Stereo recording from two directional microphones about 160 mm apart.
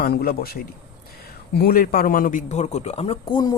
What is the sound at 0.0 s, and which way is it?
A man's voice, 75° left (ahead or behind).